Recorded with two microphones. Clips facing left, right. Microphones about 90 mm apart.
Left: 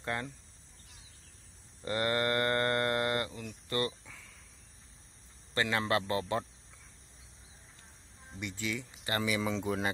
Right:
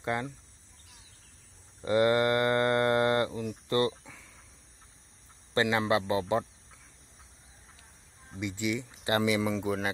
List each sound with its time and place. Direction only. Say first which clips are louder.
0.0 s speech: right 5 dB; 15° right (ahead or behind)
1.8 s livestock: right 7 dB; 20° right (ahead or behind)
3.6 s speech: right 6 dB; 25° right (ahead or behind)
4.0 s a sound: right 2 dB; 15° right (ahead or behind)
5.5 s livestock: right 4 dB; 20° right (ahead or behind)
8.4 s speech: right 6 dB; 15° right (ahead or behind)
9.4 s speech: right 3 dB; centre (ahead or behind)